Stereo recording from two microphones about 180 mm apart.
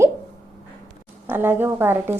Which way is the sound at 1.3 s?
10° right (ahead or behind).